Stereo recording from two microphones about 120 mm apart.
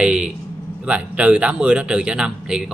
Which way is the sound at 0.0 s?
10° right (ahead or behind).